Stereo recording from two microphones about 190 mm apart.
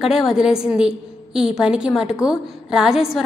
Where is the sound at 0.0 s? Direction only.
Centre (ahead or behind).